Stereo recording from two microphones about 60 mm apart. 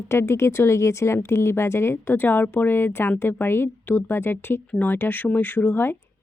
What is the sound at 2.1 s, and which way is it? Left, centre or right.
A woman's voice, left.